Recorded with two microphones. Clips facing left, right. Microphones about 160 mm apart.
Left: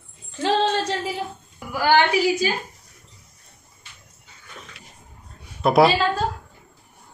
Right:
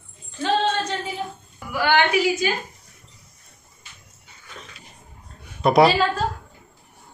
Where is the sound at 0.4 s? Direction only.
30° left (ahead or behind).